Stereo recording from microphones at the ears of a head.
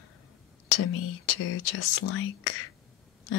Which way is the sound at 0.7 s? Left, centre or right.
Left.